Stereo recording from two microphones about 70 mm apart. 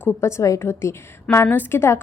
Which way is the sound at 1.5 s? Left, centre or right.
Left.